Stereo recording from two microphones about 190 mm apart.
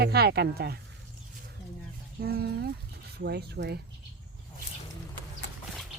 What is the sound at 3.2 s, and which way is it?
Speech, 60° right (ahead or behind).